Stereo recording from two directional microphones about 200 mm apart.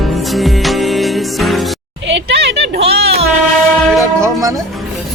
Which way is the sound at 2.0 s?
60° right (ahead or behind).